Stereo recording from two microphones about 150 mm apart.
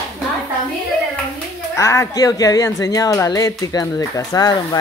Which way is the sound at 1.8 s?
20° left (ahead or behind).